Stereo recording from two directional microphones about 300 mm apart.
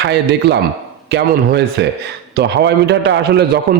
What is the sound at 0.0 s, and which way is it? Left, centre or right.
A man's voice, right.